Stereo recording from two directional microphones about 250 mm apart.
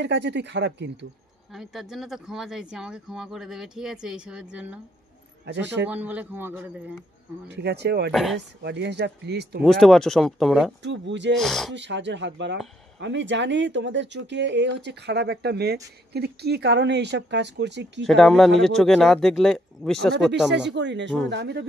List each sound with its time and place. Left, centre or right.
0.0 s speech: right
1.5 s speech: centre
5.4 s a man's voice: right
5.9 s speech: centre
7.4 s speech: right
8.1 s speech: centre
8.6 s speech: right
9.6 s speech: centre
10.8 s speech: right
11.3 s speech: centre
11.7 s speech: right
18.0 s speech: centre
20.5 s speech: right